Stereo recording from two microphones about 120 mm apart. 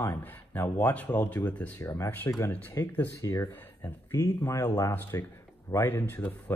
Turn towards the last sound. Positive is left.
turn(degrees=15)  # may be behind; listen again after turning